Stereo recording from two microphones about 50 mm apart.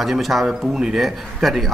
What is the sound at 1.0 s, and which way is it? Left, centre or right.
Speech, centre.